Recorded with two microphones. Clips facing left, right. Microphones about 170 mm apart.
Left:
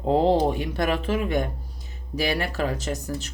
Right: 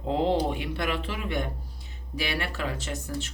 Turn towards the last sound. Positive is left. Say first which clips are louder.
# left 4 dB
turn(degrees=40)  # may be behind; listen again after turning